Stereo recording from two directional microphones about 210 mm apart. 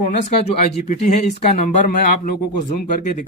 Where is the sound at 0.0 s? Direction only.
30° left (ahead or behind).